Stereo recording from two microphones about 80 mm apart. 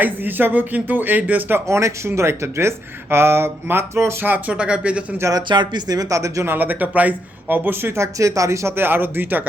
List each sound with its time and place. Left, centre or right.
0.0 s speech: right
5.5 s speech: right
6.5 s speech: right